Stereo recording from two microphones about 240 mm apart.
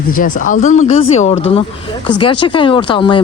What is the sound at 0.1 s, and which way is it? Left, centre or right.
Speech, left.